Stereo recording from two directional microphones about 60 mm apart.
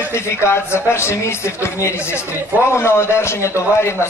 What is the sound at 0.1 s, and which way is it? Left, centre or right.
Speech, left.